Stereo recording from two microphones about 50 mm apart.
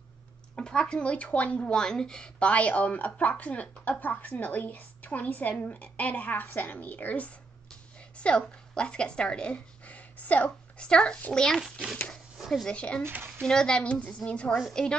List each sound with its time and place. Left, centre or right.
0.6 s a woman's voice: centre; by 7.2 s left
8.2 s speech: left
10.9 s a child's voice: centre
12.4 s a sound: centre
12.6 s a woman's voice: left